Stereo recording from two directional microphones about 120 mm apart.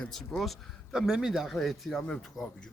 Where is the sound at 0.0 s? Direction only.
5° left (ahead or behind).